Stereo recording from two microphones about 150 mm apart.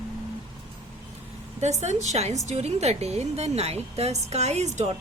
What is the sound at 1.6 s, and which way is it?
A woman's voice, 50° right (ahead or behind).